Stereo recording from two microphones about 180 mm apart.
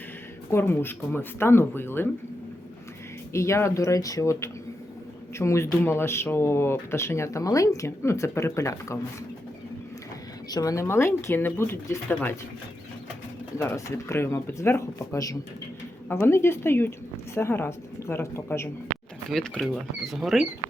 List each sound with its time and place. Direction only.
0.5 s speech: 10° left (ahead or behind)
3.3 s speech: 15° left (ahead or behind)
10.5 s speech: 20° left (ahead or behind)
13.6 s speech: 15° left (ahead or behind)
19.3 s speech: centre (ahead or behind)